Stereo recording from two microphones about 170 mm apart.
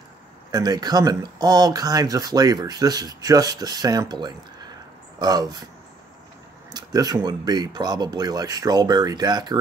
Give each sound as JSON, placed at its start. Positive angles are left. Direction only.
{"t": 0.5, "sound": "speech", "side_deg": -25}
{"t": 6.7, "sound": "speech", "side_deg": -20}